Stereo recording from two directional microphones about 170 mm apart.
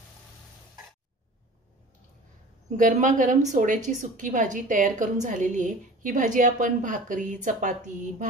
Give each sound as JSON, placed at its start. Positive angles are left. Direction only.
{"t": 2.7, "sound": "a woman's voice", "side_deg": -45}